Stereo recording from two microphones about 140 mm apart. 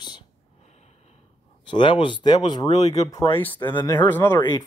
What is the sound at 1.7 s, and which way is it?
Speech, 35° left (ahead or behind).